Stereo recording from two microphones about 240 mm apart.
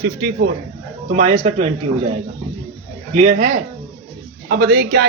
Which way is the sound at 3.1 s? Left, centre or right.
Right.